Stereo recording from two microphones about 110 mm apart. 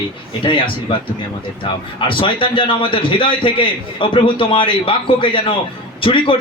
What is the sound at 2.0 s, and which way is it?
A man's voice, 50° left (ahead or behind).